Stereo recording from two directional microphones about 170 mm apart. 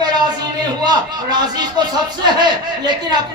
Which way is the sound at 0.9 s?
25° right (ahead or behind).